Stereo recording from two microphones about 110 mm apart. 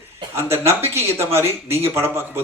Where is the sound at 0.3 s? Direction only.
20° right (ahead or behind).